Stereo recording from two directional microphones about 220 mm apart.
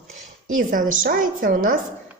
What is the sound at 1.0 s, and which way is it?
Speech, 40° right (ahead or behind).